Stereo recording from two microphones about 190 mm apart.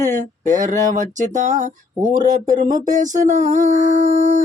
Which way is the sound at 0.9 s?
40° right (ahead or behind).